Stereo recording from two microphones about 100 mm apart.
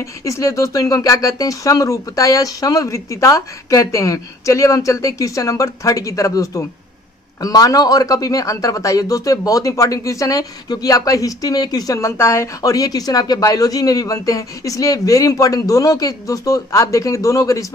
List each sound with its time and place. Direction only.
0.0 s speech: 30° left (ahead or behind)